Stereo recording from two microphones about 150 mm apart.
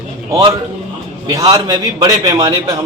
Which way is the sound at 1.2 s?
25° right (ahead or behind).